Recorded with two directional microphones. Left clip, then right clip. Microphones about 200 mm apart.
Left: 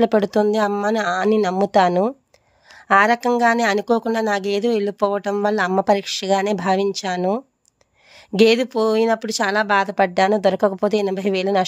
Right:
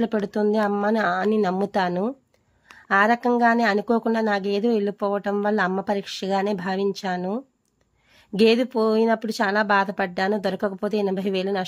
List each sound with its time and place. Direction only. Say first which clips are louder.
0.0 s speech: left 7 dB; 40° left (ahead or behind)